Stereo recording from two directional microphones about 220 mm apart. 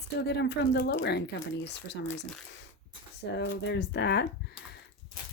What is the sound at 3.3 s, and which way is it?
Speech, 50° left (ahead or behind).